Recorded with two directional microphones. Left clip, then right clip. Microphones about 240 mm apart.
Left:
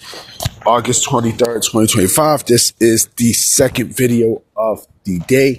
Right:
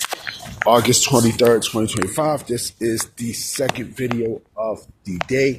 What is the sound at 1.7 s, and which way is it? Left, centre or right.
Speech, left.